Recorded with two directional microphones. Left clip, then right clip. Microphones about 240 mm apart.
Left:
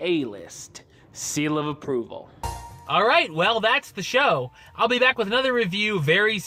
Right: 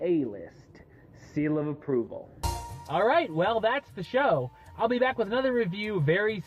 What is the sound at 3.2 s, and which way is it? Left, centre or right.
Speech, left.